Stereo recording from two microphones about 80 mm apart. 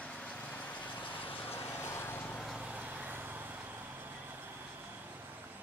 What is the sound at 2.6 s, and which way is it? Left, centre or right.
Vehicle, centre.